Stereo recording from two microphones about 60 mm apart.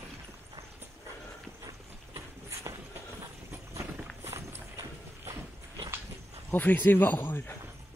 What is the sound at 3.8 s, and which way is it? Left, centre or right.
Run, right.